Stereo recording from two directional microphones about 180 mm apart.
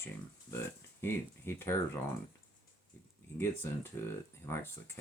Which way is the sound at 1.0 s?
15° left (ahead or behind).